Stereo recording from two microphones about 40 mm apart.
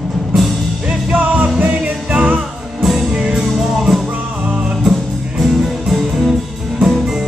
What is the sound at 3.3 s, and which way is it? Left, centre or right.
Music, centre.